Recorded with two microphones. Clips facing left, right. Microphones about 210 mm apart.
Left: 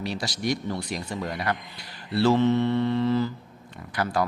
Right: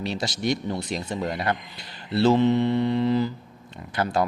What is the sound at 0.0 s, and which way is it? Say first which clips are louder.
Speech: right 2 dB; 25° right (ahead or behind).